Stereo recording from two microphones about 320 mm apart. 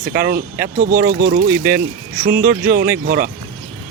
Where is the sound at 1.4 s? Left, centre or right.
Centre.